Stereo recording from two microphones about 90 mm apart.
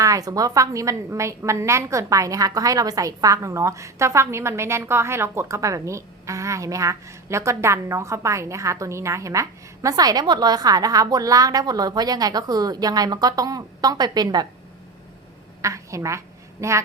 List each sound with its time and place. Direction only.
0.0 s a woman's voice: 40° right (ahead or behind)
15.6 s a woman's voice: 35° right (ahead or behind)